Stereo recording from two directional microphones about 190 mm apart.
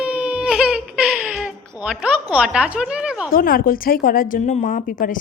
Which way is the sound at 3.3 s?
50° left (ahead or behind).